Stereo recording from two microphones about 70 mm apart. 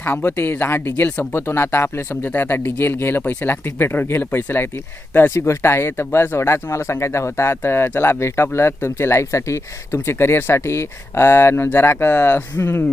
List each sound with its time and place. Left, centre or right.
0.0 s speech: left
1.3 s speech: left